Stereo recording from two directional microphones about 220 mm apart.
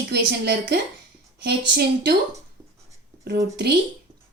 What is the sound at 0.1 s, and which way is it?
Speech, 50° right (ahead or behind).